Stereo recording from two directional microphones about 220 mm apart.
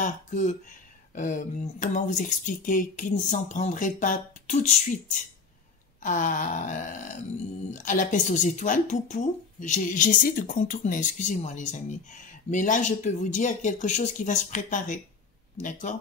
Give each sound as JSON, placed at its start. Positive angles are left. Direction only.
{"t": 0.0, "sound": "speech", "side_deg": 35}